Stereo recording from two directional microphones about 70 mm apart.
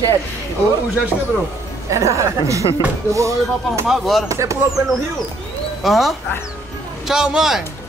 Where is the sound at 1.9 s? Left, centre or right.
Right.